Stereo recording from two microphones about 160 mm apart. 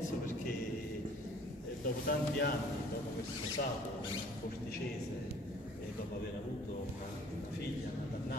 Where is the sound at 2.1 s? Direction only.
70° left (ahead or behind).